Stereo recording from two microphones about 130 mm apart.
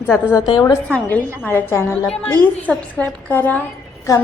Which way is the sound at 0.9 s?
10° left (ahead or behind).